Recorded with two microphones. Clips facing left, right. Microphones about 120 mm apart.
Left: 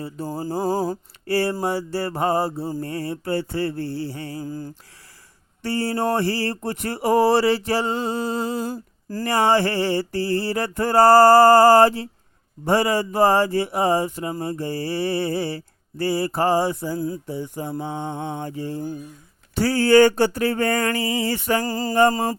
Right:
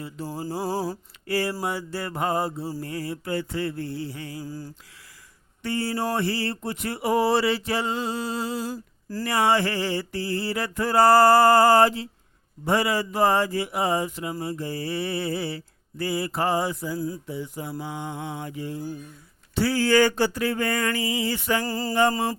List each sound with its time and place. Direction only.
0.0 s mantra: 40° left (ahead or behind)
1.3 s mantra: 30° left (ahead or behind); by 4.7 s 50° left (ahead or behind)
5.6 s mantra: 40° left (ahead or behind)
8.4 s mantra: 50° left (ahead or behind)
9.6 s mantra: 30° left (ahead or behind)
14.6 s mantra: 35° left (ahead or behind)